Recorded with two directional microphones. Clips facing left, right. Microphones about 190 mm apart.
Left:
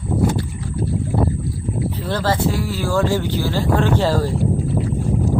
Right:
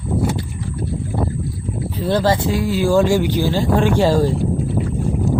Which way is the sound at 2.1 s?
15° right (ahead or behind).